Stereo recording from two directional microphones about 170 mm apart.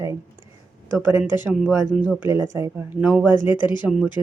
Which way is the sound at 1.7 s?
10° right (ahead or behind).